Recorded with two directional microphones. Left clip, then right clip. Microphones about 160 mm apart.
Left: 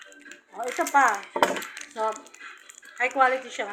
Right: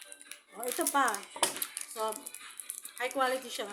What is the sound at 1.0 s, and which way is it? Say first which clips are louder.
Speech: left 9 dB; 40° right (ahead or behind).